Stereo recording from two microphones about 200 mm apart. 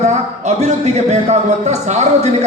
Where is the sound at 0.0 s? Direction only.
35° right (ahead or behind).